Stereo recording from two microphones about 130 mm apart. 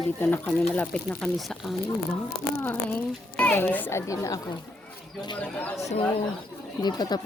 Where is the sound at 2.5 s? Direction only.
15° left (ahead or behind).